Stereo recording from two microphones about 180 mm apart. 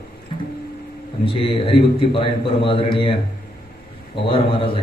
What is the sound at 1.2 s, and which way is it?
A man's voice, 30° left (ahead or behind).